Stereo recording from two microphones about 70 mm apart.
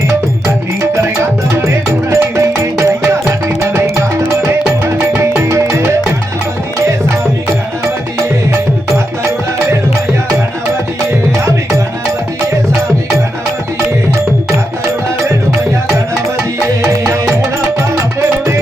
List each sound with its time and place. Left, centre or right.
0.4 s music: right
5.2 s music: right
17.1 s music: right